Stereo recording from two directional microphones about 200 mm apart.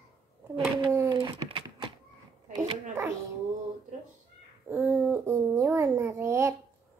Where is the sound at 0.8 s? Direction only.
20° right (ahead or behind).